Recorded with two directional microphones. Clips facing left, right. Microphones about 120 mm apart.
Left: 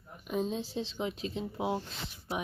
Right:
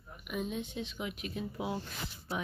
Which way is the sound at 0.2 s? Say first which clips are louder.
Left 4 dB; 30° left (ahead or behind).